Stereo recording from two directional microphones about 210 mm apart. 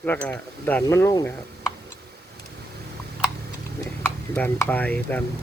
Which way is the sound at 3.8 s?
10° left (ahead or behind).